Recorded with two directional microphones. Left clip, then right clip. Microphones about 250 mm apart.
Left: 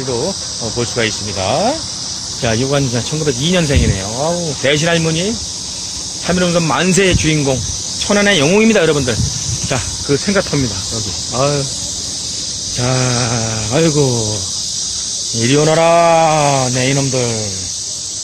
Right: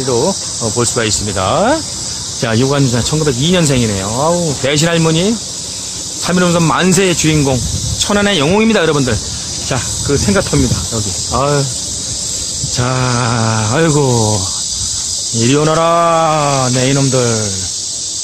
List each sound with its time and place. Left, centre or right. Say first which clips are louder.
0.7 s speech: right 2 dB; centre
10.2 s speech: right 2 dB; centre
12.8 s speech: right 1 dB; centre
15.4 s speech: even; centre